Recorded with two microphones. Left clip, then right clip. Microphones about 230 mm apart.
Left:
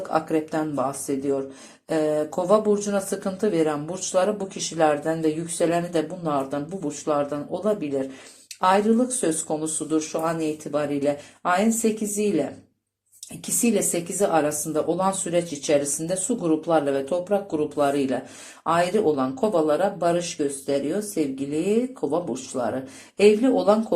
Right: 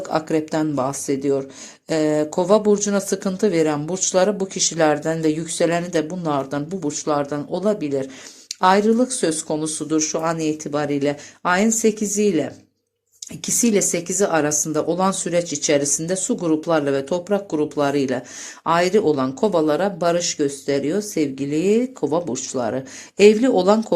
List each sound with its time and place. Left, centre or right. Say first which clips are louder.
0.0 s speech: right 2 dB; right
13.4 s speech: right 4 dB; right